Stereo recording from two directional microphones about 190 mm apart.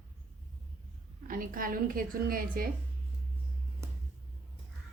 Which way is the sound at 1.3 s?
45° right (ahead or behind).